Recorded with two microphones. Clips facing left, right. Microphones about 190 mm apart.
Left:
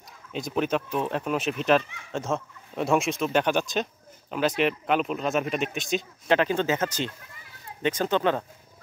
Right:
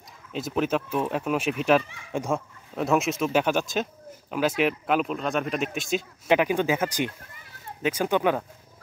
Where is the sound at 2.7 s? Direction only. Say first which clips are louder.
Even; centre (ahead or behind).